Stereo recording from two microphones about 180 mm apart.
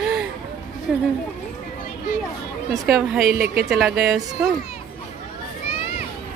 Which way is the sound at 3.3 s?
60° right (ahead or behind).